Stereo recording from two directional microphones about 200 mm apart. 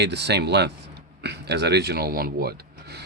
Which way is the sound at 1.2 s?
55° right (ahead or behind).